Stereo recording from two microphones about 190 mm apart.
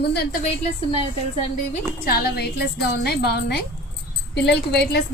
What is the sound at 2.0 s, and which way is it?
A woman's voice, 55° left (ahead or behind).